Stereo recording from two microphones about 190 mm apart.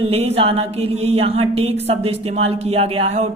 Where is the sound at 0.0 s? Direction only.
30° right (ahead or behind).